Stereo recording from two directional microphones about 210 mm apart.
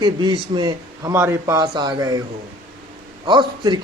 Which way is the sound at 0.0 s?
20° right (ahead or behind).